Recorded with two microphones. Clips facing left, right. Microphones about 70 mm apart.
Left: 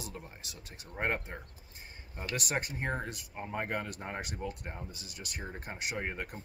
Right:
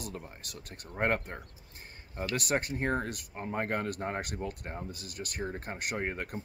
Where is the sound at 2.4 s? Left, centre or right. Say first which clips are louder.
Right 4 dB; right.